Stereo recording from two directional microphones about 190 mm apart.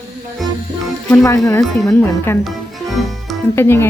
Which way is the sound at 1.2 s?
15° left (ahead or behind).